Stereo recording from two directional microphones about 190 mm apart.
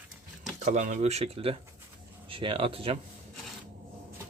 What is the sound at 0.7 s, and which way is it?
Speech, 40° right (ahead or behind).